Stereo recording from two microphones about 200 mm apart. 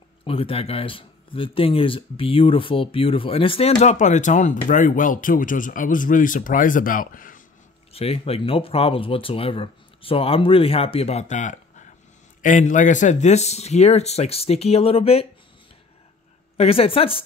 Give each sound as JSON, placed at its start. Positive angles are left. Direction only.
{"t": 0.2, "sound": "speech", "side_deg": 25}
{"t": 7.9, "sound": "speech", "side_deg": 30}
{"t": 16.5, "sound": "speech", "side_deg": 30}